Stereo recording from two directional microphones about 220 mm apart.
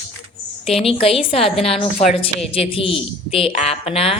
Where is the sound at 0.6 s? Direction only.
25° left (ahead or behind).